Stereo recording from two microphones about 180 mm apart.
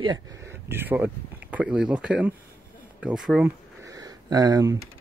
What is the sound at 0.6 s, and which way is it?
Speech, 10° right (ahead or behind).